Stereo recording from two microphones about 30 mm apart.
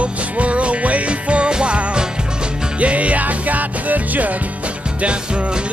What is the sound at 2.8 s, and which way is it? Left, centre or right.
Music, right.